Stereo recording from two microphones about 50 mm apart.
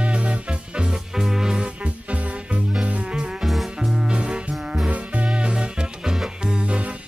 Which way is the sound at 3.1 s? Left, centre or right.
Centre.